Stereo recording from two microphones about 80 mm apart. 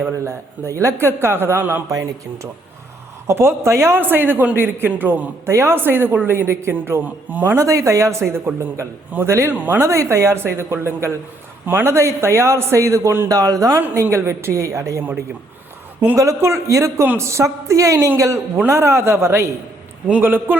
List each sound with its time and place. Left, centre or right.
0.0 s a man's voice: right
1.9 s a man's voice: right
5.5 s a man's voice: right
7.0 s a man's voice: right
7.5 s a man's voice: right
9.6 s a man's voice: right
9.9 s a man's voice: right
11.9 s a man's voice: right
13.3 s a man's voice: right
16.1 s a man's voice: right